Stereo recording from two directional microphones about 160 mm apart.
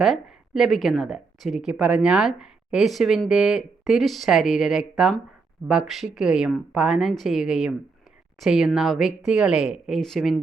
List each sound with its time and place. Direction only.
0.0 s speech: centre (ahead or behind)